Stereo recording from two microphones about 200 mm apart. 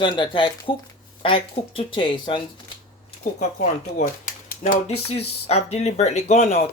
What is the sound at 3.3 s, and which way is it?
Speech, 35° left (ahead or behind).